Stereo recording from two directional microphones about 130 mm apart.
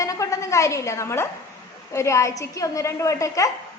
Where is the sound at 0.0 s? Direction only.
25° left (ahead or behind).